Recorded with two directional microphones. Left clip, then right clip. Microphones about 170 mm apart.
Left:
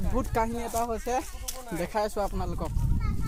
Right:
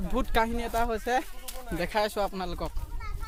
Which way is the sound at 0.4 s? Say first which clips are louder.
Even; 10° right (ahead or behind).